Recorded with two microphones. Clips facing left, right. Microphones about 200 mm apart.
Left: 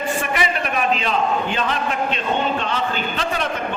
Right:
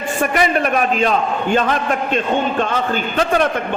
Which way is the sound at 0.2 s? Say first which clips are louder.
Right 6 dB; 45° right (ahead or behind).